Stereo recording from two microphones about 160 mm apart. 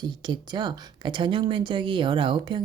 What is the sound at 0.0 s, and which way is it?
Speech, 30° right (ahead or behind).